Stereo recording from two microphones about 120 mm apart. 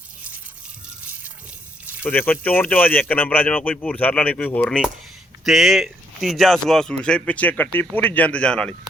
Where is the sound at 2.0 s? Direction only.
15° left (ahead or behind).